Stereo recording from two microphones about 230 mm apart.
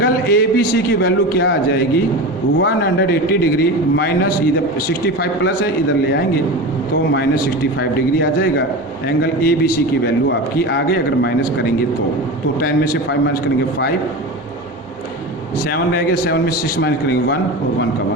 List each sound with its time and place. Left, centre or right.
0.0 s a man's voice: left
2.6 s a man's voice: left
7.1 s a man's voice: left
12.5 s a man's voice: left
16.2 s a man's voice: left